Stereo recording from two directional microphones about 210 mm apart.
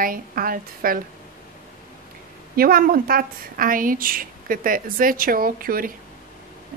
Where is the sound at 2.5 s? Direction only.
45° right (ahead or behind).